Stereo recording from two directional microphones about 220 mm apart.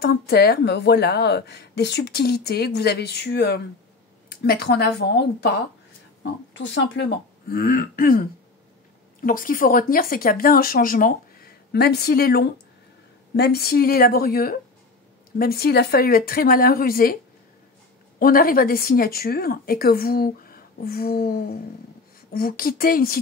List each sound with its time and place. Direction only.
0.0 s a woman's voice: 45° left (ahead or behind)
6.5 s a woman's voice: 55° left (ahead or behind)
18.2 s speech: 40° left (ahead or behind)
22.3 s speech: 40° left (ahead or behind)